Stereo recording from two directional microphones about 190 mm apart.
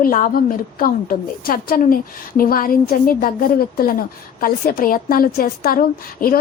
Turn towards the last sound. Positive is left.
turn(degrees=50)  # may be behind; listen again after turning